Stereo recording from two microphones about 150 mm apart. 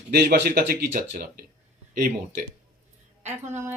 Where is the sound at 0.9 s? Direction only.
65° right (ahead or behind).